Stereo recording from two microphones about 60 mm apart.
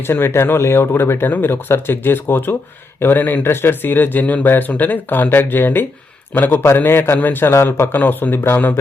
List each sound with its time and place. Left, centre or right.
0.1 s speech: left